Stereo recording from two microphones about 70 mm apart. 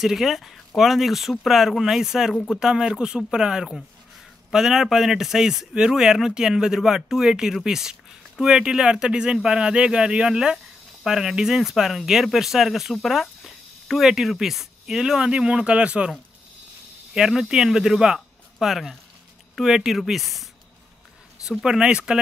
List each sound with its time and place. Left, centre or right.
0.0 s speech: centre
2.3 s speech: centre
2.6 s speech: centre
17.1 s speech: centre
21.5 s speech: centre